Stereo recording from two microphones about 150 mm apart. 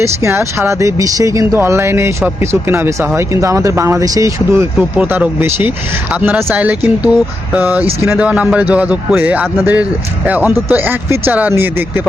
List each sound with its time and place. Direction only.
0.0 s speech: 20° right (ahead or behind)